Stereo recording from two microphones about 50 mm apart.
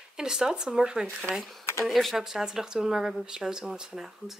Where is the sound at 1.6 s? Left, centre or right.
Left.